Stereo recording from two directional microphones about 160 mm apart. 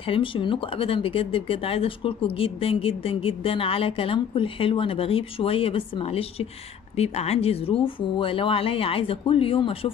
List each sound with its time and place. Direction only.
0.0 s speech: 35° left (ahead or behind)